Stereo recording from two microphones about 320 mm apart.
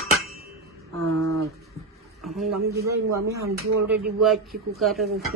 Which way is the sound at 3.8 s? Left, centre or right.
Centre.